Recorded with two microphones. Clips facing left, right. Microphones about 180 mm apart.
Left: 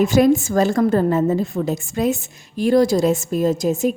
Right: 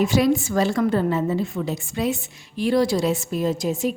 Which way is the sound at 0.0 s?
45° left (ahead or behind).